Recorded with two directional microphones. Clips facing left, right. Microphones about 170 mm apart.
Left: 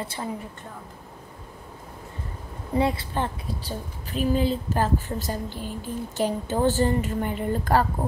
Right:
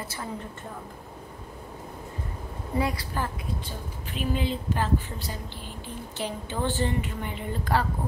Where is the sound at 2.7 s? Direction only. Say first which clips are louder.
Left 4 dB; 25° left (ahead or behind).